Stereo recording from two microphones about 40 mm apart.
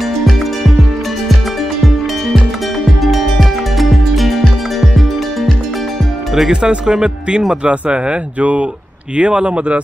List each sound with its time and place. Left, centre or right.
3.0 s music: centre
6.3 s speech: centre